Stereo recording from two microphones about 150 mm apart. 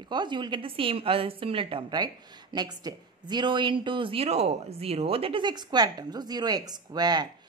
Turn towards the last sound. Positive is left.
turn(degrees=-25)  # may be behind; listen again after turning